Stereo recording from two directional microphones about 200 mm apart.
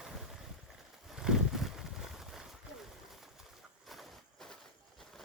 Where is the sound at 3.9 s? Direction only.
Centre (ahead or behind).